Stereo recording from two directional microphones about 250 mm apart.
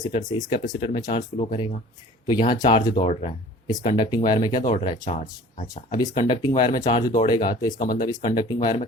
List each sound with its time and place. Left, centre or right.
0.0 s speech: centre
5.7 s speech: centre
7.8 s speech: left
8.0 s speech: centre